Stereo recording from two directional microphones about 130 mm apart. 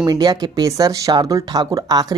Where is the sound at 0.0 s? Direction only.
35° right (ahead or behind).